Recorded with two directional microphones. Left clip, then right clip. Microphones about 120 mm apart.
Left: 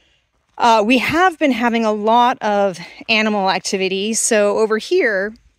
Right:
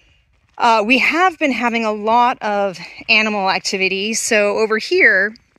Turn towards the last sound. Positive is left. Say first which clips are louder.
# right 4 dB
turn(degrees=20)  # may be behind; listen again after turning